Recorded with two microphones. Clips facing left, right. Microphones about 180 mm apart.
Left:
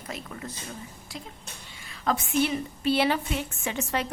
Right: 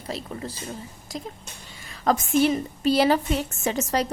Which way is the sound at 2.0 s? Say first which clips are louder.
Right 5 dB; 45° right (ahead or behind).